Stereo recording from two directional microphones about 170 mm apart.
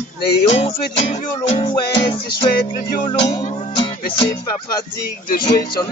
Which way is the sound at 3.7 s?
30° left (ahead or behind).